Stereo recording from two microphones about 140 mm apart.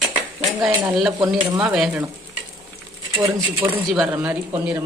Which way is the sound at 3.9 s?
5° right (ahead or behind).